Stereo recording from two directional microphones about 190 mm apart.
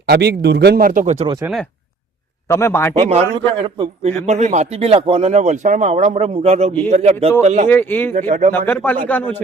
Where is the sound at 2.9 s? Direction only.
30° right (ahead or behind).